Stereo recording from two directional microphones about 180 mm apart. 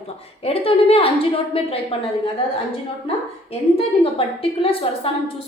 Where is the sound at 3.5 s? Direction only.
30° left (ahead or behind).